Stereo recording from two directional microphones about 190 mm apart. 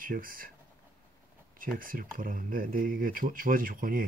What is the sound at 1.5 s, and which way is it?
Speech, 45° right (ahead or behind).